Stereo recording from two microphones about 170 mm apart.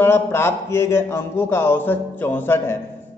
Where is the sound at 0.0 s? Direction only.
15° left (ahead or behind).